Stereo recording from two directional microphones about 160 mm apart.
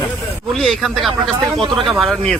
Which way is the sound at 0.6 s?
Centre (ahead or behind).